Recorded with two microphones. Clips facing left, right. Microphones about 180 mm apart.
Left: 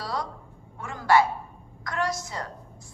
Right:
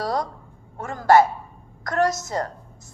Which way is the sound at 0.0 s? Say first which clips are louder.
Right 7 dB; 45° right (ahead or behind).